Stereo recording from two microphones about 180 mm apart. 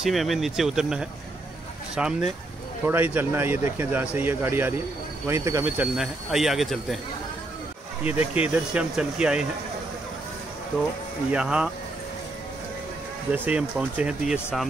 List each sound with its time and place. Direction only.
0.0 s speech: centre (ahead or behind); by 5.7 s 15° right (ahead or behind)
5.7 s speech: 5° right (ahead or behind)
8.0 s speech: 10° right (ahead or behind)
11.3 s speech: 5° right (ahead or behind)
13.3 s speech: 10° right (ahead or behind)